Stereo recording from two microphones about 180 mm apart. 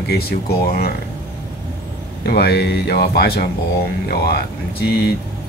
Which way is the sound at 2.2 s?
60° left (ahead or behind).